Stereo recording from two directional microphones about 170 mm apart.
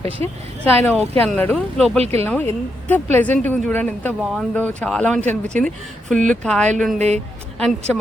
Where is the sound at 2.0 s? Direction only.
35° right (ahead or behind).